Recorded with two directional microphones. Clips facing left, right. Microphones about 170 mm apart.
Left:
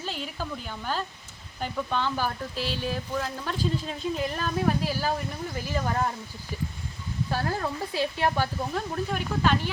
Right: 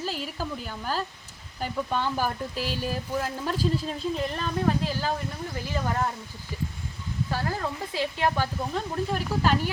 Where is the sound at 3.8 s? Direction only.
Centre (ahead or behind).